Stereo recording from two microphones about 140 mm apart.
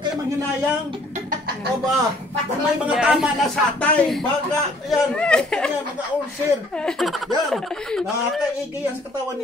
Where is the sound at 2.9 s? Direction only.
5° right (ahead or behind).